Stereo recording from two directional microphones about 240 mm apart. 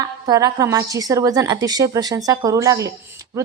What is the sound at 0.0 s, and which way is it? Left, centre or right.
A woman's voice, centre.